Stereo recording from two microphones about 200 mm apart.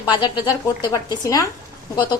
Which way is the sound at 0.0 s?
25° left (ahead or behind).